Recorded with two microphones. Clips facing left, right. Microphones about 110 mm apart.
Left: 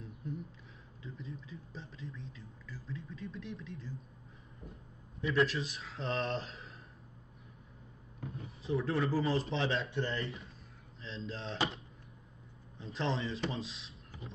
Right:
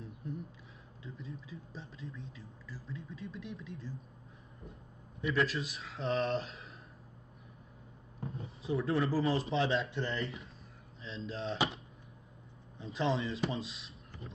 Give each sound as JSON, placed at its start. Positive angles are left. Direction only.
{"t": 1.0, "sound": "speech", "side_deg": 0}
{"t": 5.3, "sound": "speech", "side_deg": 0}
{"t": 8.2, "sound": "a sound", "side_deg": -30}
{"t": 8.6, "sound": "speech", "side_deg": 0}